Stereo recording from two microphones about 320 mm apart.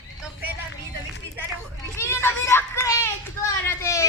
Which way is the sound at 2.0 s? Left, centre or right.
Centre.